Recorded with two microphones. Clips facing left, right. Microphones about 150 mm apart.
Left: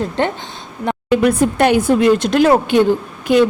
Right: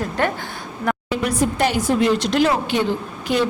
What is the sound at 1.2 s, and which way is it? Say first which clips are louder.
Speech: left 5 dB; 60° left (ahead or behind).